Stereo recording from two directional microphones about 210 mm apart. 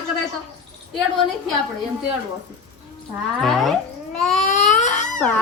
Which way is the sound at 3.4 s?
Centre (ahead or behind).